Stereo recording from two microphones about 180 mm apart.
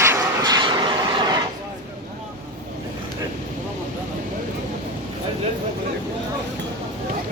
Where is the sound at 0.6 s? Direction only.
25° right (ahead or behind).